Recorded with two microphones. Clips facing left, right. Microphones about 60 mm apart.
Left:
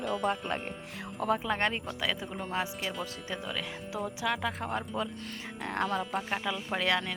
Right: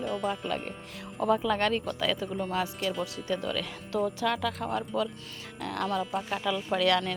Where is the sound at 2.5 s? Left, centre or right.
Left.